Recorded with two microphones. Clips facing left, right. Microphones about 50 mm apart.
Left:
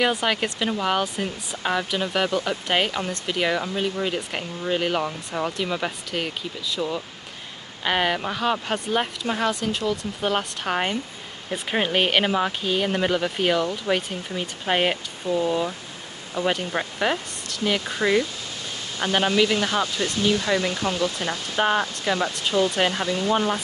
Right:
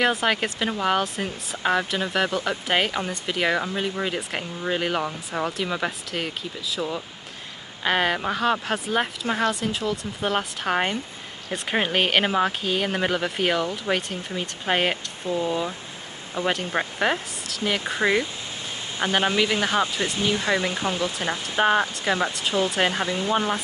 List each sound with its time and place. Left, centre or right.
0.0 s speech: centre
15.3 s speech: right
22.3 s speech: centre